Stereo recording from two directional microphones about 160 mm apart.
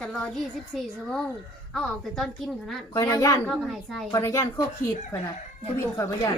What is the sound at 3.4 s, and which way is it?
Speech, centre (ahead or behind).